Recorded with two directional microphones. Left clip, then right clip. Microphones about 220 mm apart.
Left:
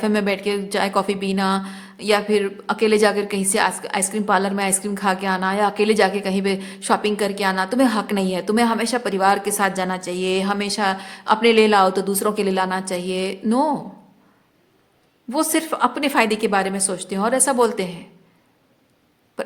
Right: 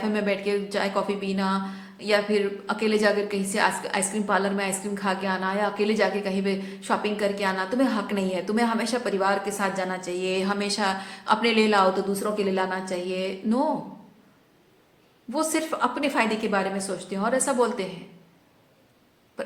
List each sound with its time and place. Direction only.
0.0 s a woman's voice: 40° left (ahead or behind)
15.3 s a woman's voice: 40° left (ahead or behind)